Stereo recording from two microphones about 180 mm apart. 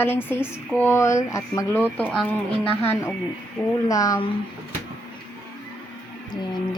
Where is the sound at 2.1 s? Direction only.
5° left (ahead or behind).